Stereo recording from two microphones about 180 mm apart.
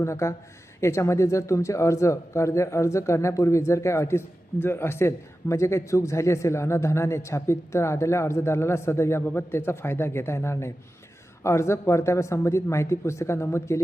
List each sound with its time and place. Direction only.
0.0 s a man's voice: 15° left (ahead or behind)